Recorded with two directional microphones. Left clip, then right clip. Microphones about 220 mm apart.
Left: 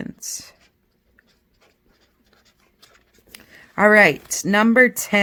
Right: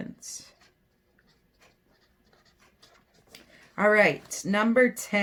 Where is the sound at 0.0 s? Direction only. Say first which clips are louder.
Left 9 dB; 45° left (ahead or behind).